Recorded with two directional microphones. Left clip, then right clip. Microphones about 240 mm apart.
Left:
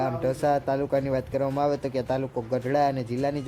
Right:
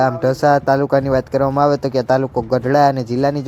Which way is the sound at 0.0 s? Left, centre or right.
Right.